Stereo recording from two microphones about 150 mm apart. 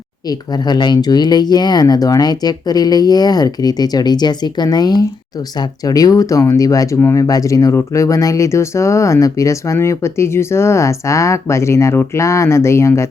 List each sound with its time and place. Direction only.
0.3 s speech: 30° left (ahead or behind)